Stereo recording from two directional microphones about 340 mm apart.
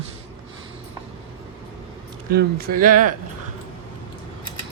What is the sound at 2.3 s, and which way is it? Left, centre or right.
Speech, right.